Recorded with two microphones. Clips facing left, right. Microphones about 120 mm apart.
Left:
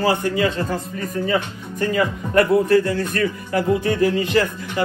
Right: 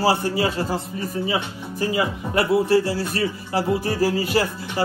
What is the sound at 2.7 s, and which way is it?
A man's voice, 30° right (ahead or behind).